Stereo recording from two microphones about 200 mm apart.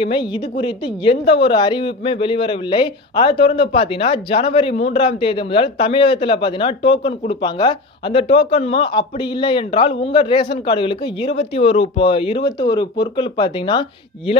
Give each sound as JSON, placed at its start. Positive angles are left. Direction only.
{"t": 0.0, "sound": "a woman's voice", "side_deg": 25}